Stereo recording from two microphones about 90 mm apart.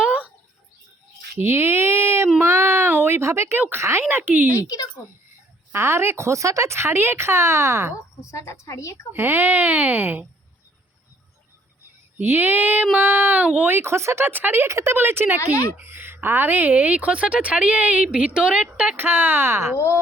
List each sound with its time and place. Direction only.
0.0 s bird: 15° right (ahead or behind)
1.4 s a sound: 25° right (ahead or behind)
3.6 s speech: 25° right (ahead or behind)
4.5 s speech: 35° left (ahead or behind)
5.7 s speech: 30° right (ahead or behind)
8.2 s speech: 35° left (ahead or behind)
9.1 s speech: 25° right (ahead or behind)
12.1 s a woman's voice: 20° right (ahead or behind)